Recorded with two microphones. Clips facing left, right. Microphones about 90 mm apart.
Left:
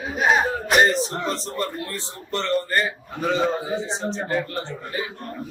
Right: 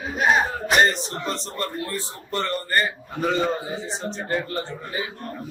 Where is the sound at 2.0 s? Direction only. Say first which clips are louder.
Even; 10° right (ahead or behind).